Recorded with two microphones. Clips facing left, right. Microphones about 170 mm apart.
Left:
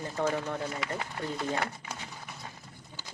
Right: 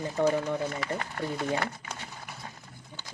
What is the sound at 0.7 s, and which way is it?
Speech, 5° left (ahead or behind).